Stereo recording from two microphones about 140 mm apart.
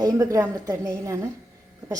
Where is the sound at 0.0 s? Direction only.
25° right (ahead or behind).